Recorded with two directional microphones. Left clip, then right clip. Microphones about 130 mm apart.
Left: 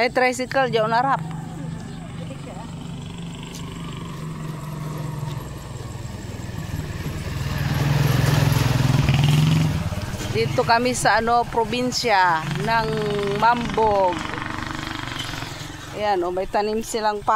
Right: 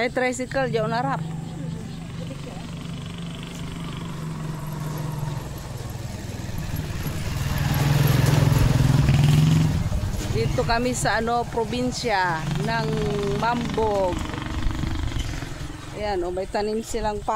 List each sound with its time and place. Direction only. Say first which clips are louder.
0.0 s speech: left 4 dB; 15° left (ahead or behind)
7.4 s vehicle: even; centre (ahead or behind)
7.9 s vehicle: left 1 dB; 20° left (ahead or behind)
8.2 s vehicle: left 1 dB; 40° left (ahead or behind)
8.5 s vehicle: left 1 dB; 20° left (ahead or behind)
8.9 s vehicle: left 2 dB; 5° left (ahead or behind)
10.6 s speech: left 5 dB; 15° left (ahead or behind)
12.8 s speech: left 2 dB; 15° right (ahead or behind)
13.9 s vehicle: left 4 dB; 10° right (ahead or behind)
16.0 s speech: left 4 dB; 15° left (ahead or behind)